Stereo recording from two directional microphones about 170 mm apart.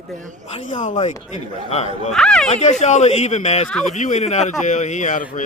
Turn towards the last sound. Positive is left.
turn(degrees=50)  # may be behind; listen again after turning